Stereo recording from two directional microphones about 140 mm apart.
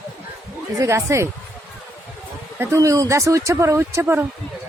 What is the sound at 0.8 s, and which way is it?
Speech, 20° right (ahead or behind).